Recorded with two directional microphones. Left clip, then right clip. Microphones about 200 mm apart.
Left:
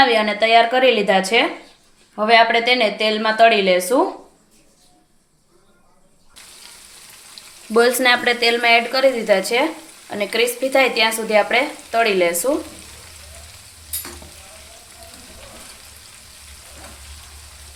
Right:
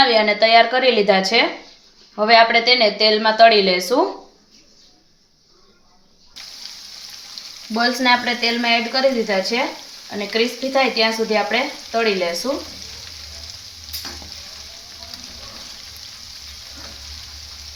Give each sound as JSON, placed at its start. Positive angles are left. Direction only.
{"t": 0.0, "sound": "a woman's voice", "side_deg": 5}
{"t": 7.7, "sound": "speech", "side_deg": 50}